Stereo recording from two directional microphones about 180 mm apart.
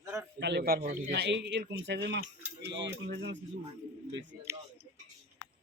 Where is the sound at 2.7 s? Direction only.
80° right.